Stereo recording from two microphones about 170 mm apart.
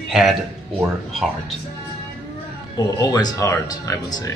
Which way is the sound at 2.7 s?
25° left (ahead or behind).